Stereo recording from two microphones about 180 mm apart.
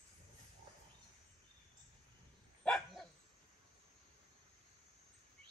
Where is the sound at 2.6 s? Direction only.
5° left (ahead or behind).